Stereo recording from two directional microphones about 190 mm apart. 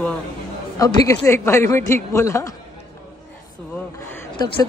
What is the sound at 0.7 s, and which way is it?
A man's voice, 20° left (ahead or behind).